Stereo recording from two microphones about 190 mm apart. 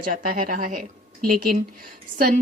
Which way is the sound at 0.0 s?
45° right (ahead or behind).